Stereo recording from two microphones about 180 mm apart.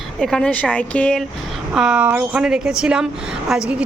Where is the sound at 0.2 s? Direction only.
5° left (ahead or behind).